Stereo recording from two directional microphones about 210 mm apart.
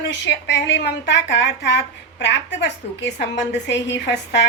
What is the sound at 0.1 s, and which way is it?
A woman's voice, 55° left (ahead or behind).